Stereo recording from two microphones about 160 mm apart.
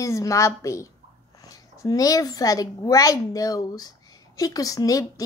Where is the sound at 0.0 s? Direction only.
20° left (ahead or behind).